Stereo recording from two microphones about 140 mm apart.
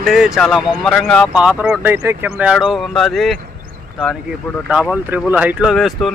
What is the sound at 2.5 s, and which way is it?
Speech, centre (ahead or behind).